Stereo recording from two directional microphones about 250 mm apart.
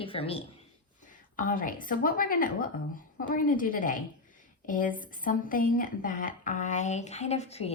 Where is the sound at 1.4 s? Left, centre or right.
Left.